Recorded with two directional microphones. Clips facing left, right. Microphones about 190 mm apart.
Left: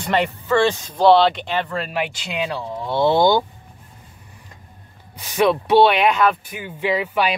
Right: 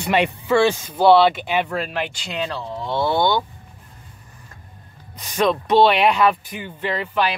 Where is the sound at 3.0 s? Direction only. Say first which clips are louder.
Left 5 dB; 25° left (ahead or behind).